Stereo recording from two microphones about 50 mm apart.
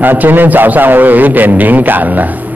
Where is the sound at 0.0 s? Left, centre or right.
Right.